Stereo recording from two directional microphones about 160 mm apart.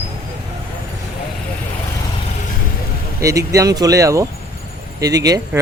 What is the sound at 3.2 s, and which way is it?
A man's voice, 20° right (ahead or behind).